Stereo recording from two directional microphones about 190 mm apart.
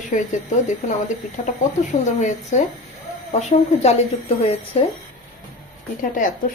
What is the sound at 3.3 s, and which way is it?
Speech, 35° left (ahead or behind).